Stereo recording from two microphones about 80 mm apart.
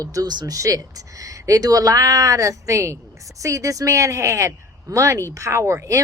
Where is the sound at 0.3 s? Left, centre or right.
Right.